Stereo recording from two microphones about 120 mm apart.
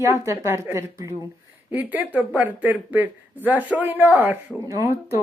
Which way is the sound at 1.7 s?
15° right (ahead or behind).